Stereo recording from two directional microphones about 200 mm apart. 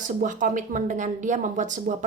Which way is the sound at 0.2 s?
40° right (ahead or behind).